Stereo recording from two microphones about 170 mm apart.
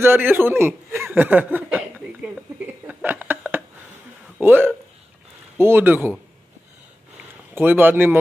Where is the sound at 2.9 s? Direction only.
10° right (ahead or behind).